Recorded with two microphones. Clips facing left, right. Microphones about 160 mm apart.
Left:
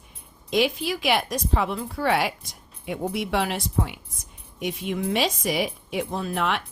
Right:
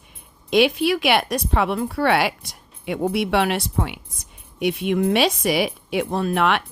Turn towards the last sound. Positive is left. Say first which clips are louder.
# right 6 dB
turn(degrees=-70)  # may be behind; listen again after turning